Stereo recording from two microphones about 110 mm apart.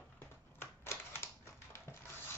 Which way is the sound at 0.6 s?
25° left (ahead or behind).